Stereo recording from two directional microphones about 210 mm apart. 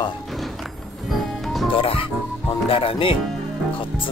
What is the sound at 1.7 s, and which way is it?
Speech, 25° left (ahead or behind).